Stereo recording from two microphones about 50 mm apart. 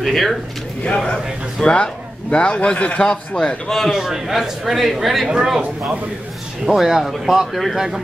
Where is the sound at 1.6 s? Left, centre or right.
Centre.